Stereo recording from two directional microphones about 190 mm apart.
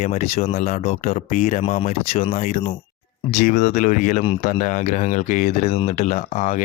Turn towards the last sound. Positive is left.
turn(degrees=35)  # may be behind; listen again after turning